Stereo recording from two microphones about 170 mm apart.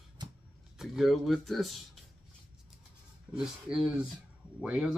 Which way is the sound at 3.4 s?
5° right (ahead or behind).